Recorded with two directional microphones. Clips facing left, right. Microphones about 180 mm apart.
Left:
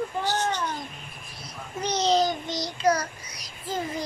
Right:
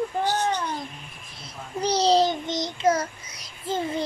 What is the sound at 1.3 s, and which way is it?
A child's voice, 30° right (ahead or behind).